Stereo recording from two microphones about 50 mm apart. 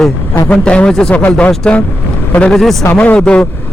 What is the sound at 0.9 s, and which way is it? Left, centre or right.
Speech, centre.